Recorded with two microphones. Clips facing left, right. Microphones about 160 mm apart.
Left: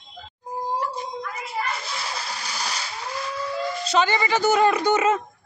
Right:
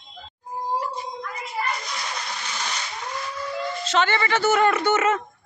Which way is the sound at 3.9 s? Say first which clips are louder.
Left 1 dB; 15° left (ahead or behind).